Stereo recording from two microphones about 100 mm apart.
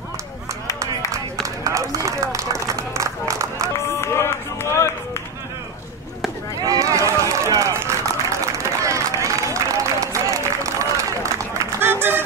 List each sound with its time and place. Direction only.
0.7 s run: 35° right (ahead or behind)
4.0 s run: 25° left (ahead or behind)
6.6 s run: 35° right (ahead or behind)
11.5 s music: 20° right (ahead or behind)